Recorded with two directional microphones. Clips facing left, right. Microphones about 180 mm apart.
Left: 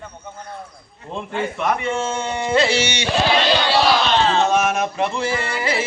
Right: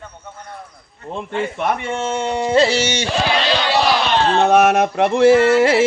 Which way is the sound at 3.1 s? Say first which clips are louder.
Left 3 dB; 5° left (ahead or behind).